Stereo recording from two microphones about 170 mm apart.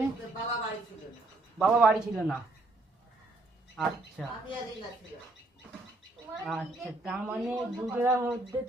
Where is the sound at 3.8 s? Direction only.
5° right (ahead or behind).